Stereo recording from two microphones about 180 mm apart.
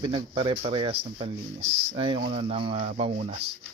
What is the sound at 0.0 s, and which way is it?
Speech, 30° right (ahead or behind).